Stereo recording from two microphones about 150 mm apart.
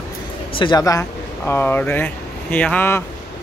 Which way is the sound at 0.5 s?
30° left (ahead or behind).